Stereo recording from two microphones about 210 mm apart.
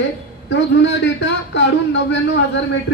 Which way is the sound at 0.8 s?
55° left (ahead or behind).